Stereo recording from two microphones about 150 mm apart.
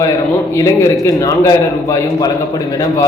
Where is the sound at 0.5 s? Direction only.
20° left (ahead or behind).